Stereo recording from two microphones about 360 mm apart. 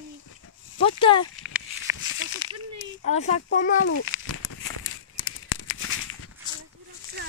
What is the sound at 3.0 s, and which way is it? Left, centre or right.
Speech, centre.